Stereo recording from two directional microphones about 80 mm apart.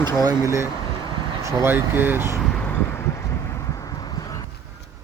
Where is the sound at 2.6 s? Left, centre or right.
Left.